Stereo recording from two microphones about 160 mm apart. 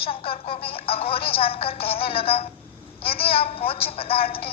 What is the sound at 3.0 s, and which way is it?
Speech, 70° left (ahead or behind).